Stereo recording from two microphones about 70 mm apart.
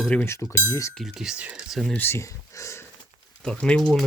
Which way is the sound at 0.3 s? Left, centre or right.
Left.